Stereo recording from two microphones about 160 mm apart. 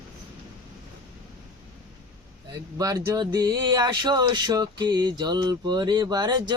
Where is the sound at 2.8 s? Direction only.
20° right (ahead or behind).